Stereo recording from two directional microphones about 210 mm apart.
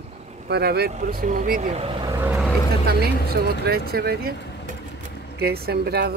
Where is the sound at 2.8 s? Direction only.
45° right (ahead or behind).